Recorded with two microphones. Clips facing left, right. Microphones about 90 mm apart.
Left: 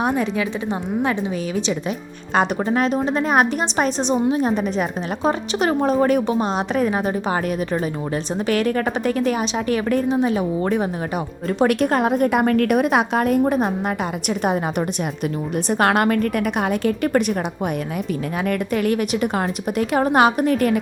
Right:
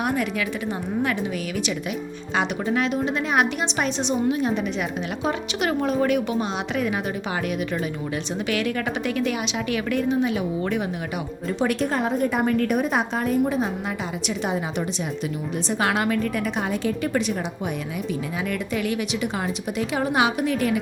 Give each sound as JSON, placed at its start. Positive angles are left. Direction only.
{"t": 0.0, "sound": "a woman's voice", "side_deg": 30}
{"t": 2.3, "sound": "a woman's voice", "side_deg": 45}
{"t": 11.4, "sound": "a woman's voice", "side_deg": 55}
{"t": 18.4, "sound": "a woman's voice", "side_deg": 50}